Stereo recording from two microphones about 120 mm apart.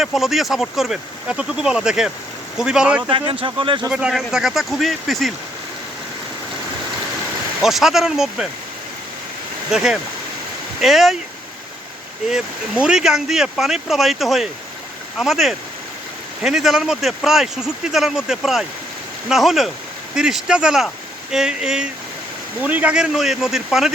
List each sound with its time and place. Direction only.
0.0 s speech: centre (ahead or behind)
3.1 s speech: 45° right (ahead or behind)
3.8 s speech: 5° right (ahead or behind)
7.6 s speech: centre (ahead or behind)
9.7 s speech: 5° right (ahead or behind)
12.3 s speech: 5° right (ahead or behind)